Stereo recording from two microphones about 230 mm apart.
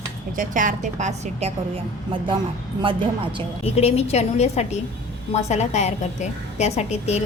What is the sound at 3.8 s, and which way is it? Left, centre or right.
A woman's voice, left.